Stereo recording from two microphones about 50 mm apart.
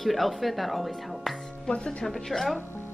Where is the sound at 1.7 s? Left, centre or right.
Centre.